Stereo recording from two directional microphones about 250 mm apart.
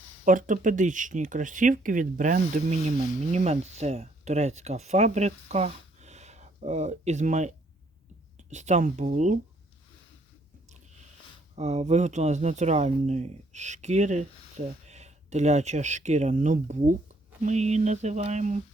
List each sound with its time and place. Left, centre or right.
0.3 s speech: right
11.5 s speech: right